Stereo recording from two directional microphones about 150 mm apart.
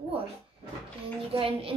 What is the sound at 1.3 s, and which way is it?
Speech, 35° right (ahead or behind).